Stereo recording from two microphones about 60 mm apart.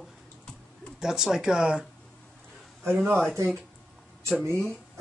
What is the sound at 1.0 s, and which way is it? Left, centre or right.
Speech, centre.